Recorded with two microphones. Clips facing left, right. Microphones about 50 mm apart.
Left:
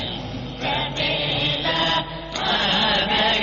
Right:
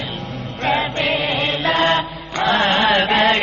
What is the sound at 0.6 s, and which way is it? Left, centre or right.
Music, right.